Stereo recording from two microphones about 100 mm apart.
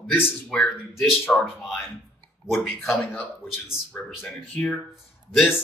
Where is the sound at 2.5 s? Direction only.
20° left (ahead or behind).